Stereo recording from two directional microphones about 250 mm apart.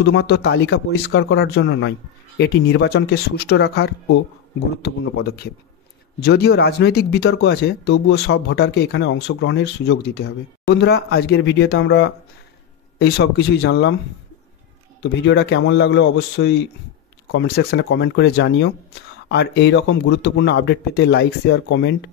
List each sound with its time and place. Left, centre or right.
0.0 s speech: left
5.2 s speech: left
15.0 s speech: left